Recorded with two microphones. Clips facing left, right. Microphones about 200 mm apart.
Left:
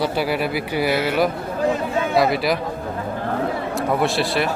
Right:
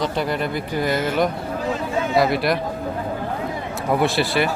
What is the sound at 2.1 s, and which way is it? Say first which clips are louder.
Speech: even; centre (ahead or behind).